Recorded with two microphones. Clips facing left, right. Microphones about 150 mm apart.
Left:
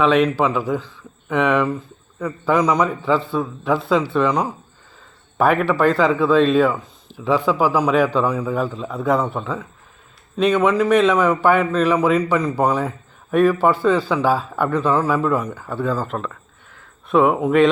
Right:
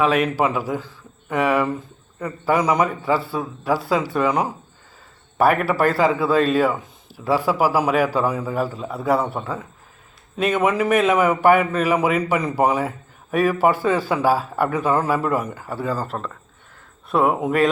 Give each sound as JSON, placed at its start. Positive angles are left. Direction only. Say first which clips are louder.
{"t": 0.0, "sound": "speech", "louder": "left 3 dB", "side_deg": -5}
{"t": 5.4, "sound": "speech", "louder": "left 1 dB", "side_deg": -5}
{"t": 10.7, "sound": "a man's voice", "louder": "left 3 dB", "side_deg": -50}
{"t": 10.9, "sound": "speech", "louder": "left 2 dB", "side_deg": -10}
{"t": 17.1, "sound": "speech", "louder": "left 3 dB", "side_deg": -5}